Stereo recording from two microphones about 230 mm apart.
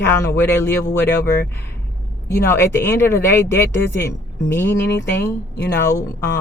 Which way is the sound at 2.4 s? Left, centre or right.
Centre.